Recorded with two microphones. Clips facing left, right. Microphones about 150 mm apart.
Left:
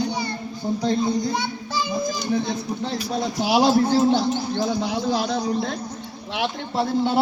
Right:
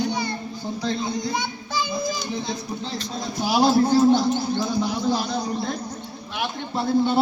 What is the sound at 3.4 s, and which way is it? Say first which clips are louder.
Speech: left 1 dB; 15° left (ahead or behind).